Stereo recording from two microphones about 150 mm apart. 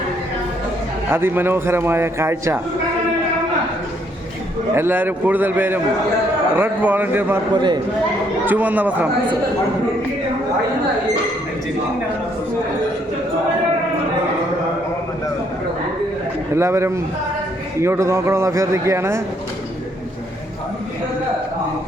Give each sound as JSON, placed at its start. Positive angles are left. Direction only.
{"t": 1.1, "sound": "a man's voice", "side_deg": -15}
{"t": 4.7, "sound": "a man's voice", "side_deg": -15}
{"t": 7.5, "sound": "a man's voice", "side_deg": -30}
{"t": 8.4, "sound": "a man's voice", "side_deg": -10}
{"t": 16.6, "sound": "a man's voice", "side_deg": -20}